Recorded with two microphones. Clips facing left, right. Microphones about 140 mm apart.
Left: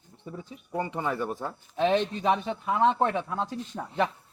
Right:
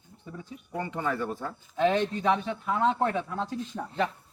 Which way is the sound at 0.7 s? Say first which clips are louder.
Left 1 dB; 20° left (ahead or behind).